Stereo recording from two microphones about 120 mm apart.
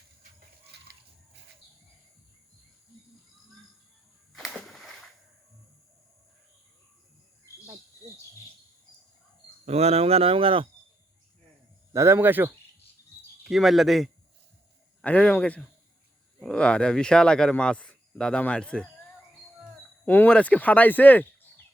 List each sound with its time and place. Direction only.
4.3 s a sound: centre (ahead or behind)
9.6 s speech: 60° right (ahead or behind)
11.9 s speech: 20° right (ahead or behind)
13.4 s speech: 5° right (ahead or behind)
15.0 s speech: 10° left (ahead or behind)
20.1 s speech: 15° left (ahead or behind)